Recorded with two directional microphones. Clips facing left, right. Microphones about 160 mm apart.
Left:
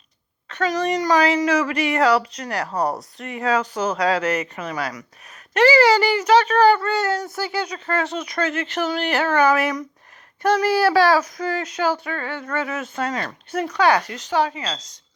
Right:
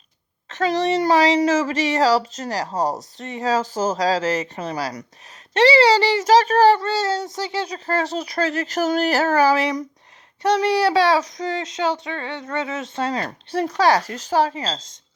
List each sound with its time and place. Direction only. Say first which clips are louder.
0.4 s a child's voice: right 2 dB; 35° right (ahead or behind)